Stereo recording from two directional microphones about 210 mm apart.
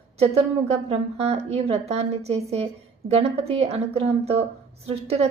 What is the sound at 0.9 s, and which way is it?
A woman's voice, 30° right (ahead or behind).